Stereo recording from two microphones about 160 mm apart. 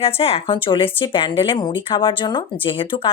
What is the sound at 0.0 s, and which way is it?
A woman's voice, 40° left (ahead or behind).